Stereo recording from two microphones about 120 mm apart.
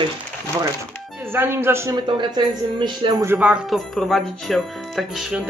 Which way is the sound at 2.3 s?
35° right (ahead or behind).